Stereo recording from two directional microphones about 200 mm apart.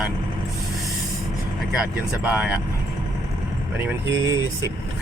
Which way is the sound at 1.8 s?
5° right (ahead or behind).